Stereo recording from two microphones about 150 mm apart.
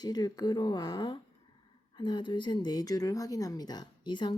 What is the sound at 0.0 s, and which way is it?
Speech, 25° left (ahead or behind).